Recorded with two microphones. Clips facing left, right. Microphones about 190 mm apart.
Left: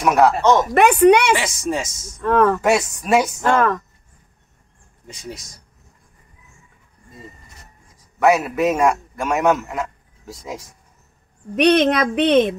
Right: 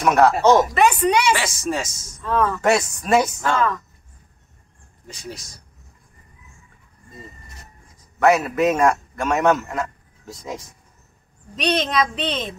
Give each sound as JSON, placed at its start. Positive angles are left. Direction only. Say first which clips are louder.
{"t": 0.0, "sound": "speech", "louder": "left 1 dB", "side_deg": 10}
{"t": 0.3, "sound": "speech", "louder": "right 1 dB", "side_deg": -10}
{"t": 0.7, "sound": "a woman's voice", "louder": "left 6 dB", "side_deg": 60}
{"t": 1.3, "sound": "speech", "louder": "left 2 dB", "side_deg": 20}
{"t": 2.2, "sound": "a woman's voice", "louder": "left 5 dB", "side_deg": 60}
{"t": 2.6, "sound": "speech", "louder": "left 1 dB", "side_deg": 10}
{"t": 3.4, "sound": "a woman's voice", "louder": "left 4 dB", "side_deg": 55}
{"t": 8.2, "sound": "a man's voice", "louder": "even", "side_deg": 5}
{"t": 11.5, "sound": "a woman's voice", "louder": "left 7 dB", "side_deg": 60}